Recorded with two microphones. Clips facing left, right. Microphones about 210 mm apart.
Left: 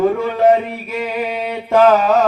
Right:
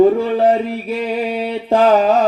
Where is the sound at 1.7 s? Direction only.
30° right (ahead or behind).